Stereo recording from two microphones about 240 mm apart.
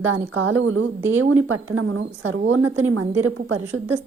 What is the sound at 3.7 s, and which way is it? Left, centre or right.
Speech, right.